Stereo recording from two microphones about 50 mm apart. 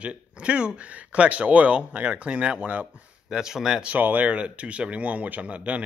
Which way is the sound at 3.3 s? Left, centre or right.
Centre.